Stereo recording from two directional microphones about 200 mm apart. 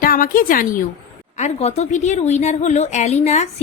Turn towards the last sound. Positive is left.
turn(degrees=35)  # may be behind; listen again after turning